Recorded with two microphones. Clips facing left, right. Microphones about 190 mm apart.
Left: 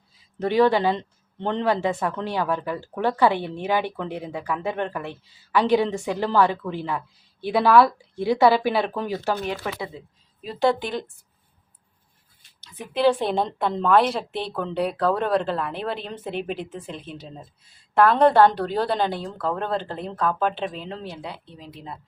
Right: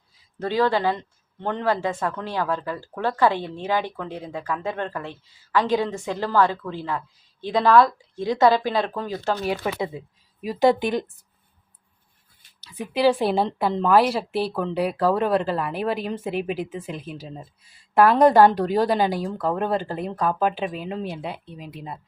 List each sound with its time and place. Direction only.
0.3 s speech: 20° left (ahead or behind)
9.4 s a woman's voice: 10° right (ahead or behind)
12.6 s a woman's voice: 10° right (ahead or behind)